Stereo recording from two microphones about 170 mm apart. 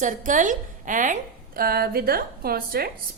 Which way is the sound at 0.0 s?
50° right (ahead or behind).